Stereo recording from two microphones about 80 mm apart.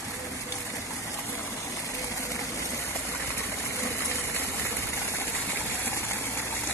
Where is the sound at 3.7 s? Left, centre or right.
Left.